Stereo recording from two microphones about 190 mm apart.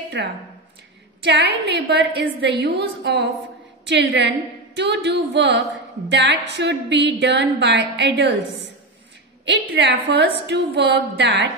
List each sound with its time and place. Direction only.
0.2 s a woman's voice: 65° right (ahead or behind)
9.5 s a woman's voice: 70° right (ahead or behind)